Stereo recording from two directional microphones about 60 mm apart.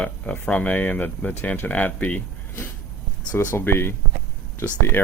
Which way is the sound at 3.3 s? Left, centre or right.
Left.